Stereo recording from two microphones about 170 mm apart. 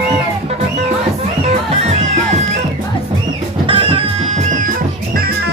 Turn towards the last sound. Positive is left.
turn(degrees=-30)  # may be behind; listen again after turning